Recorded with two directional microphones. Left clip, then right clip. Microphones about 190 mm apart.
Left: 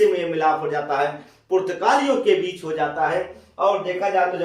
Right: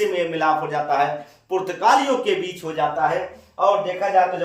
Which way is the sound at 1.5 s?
20° right (ahead or behind).